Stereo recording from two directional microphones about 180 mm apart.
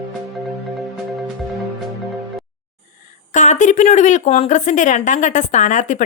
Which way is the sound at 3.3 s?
40° left (ahead or behind).